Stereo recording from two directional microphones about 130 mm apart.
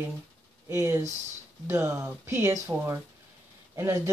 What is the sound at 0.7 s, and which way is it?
Speech, 20° right (ahead or behind).